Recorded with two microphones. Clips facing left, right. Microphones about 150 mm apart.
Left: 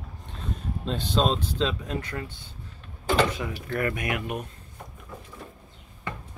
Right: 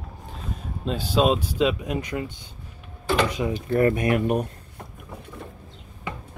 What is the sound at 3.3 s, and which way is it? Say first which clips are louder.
Speech: right 7 dB; 20° right (ahead or behind).